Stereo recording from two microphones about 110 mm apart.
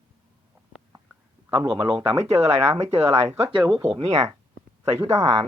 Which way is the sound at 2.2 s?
75° right (ahead or behind).